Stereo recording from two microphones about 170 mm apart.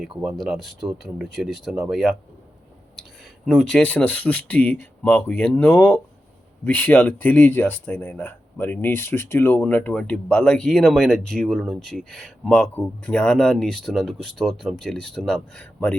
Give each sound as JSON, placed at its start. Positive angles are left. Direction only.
{"t": 0.2, "sound": "speech", "side_deg": -5}
{"t": 3.4, "sound": "speech", "side_deg": 5}